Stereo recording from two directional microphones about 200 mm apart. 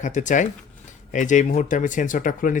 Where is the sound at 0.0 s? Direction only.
40° left (ahead or behind).